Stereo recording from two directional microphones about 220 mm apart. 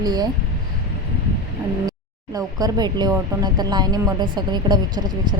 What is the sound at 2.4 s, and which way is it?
Speech, 15° right (ahead or behind).